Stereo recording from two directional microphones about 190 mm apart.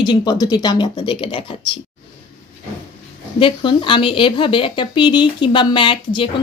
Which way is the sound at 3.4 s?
25° left (ahead or behind).